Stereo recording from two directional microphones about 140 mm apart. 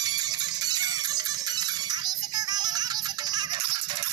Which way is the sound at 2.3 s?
30° right (ahead or behind).